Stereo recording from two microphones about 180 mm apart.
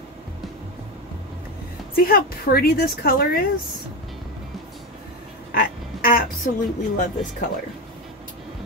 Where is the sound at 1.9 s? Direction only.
55° left (ahead or behind).